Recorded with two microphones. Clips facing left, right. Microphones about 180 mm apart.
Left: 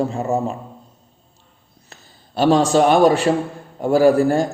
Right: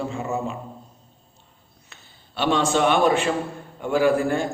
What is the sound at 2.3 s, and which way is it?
A man's voice, 40° left (ahead or behind).